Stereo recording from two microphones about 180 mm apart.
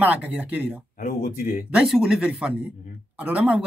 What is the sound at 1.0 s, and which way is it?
Speech, 50° left (ahead or behind).